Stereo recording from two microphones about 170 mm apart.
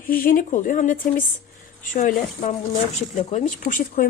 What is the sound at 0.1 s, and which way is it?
A woman's voice, 55° left (ahead or behind).